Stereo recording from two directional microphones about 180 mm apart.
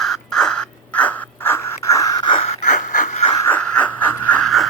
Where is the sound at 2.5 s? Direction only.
45° left (ahead or behind).